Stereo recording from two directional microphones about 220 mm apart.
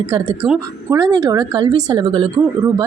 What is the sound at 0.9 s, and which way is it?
A woman's voice, 15° right (ahead or behind).